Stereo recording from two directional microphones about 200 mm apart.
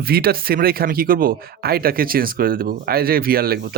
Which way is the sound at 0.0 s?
50° right (ahead or behind).